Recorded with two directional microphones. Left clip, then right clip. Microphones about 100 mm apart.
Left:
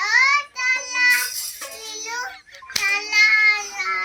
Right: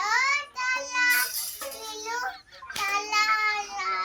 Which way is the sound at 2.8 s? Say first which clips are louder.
Left 8 dB; 25° right (ahead or behind).